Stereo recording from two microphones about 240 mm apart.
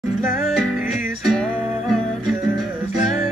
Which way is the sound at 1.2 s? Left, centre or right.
Centre.